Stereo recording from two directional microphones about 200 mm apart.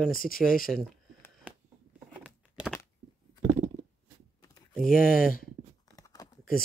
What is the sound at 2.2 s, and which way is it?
Patter, 5° right (ahead or behind).